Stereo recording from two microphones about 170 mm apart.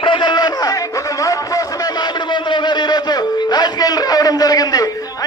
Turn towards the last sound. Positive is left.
turn(degrees=20)  # may be behind; listen again after turning